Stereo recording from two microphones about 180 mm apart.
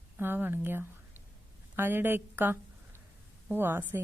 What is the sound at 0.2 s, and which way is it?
A woman's voice, 10° right (ahead or behind).